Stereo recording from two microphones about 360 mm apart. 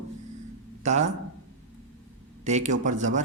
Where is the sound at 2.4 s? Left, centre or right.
Centre.